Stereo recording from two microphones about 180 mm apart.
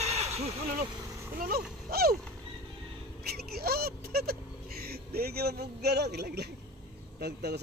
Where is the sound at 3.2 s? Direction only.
60° right (ahead or behind).